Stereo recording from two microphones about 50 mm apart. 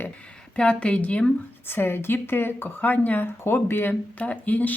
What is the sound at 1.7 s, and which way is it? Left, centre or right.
Speech, left.